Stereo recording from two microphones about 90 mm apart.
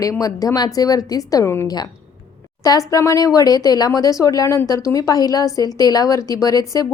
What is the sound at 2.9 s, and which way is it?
A woman's voice, 40° left (ahead or behind).